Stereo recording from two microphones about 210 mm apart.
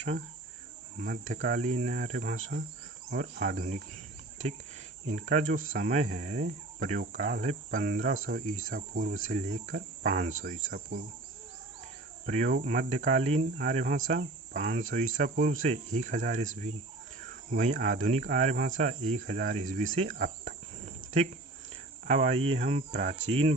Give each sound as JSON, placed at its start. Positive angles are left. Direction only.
{"t": 1.0, "sound": "speech", "side_deg": -40}
{"t": 5.0, "sound": "speech", "side_deg": -35}
{"t": 12.2, "sound": "speech", "side_deg": -35}
{"t": 13.6, "sound": "speech", "side_deg": -40}